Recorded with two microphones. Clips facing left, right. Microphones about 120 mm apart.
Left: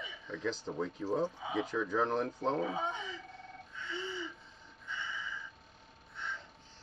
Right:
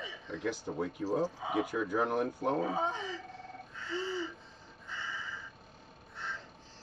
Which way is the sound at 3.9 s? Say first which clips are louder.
Right 5 dB; 40° right (ahead or behind).